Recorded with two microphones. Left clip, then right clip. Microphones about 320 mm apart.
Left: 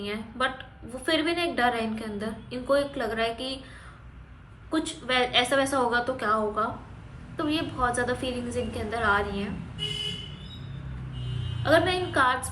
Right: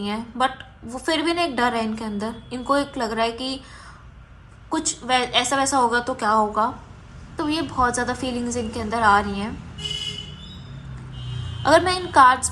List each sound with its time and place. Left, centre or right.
0.0 s a woman's voice: centre
4.7 s a woman's voice: centre
11.6 s a woman's voice: centre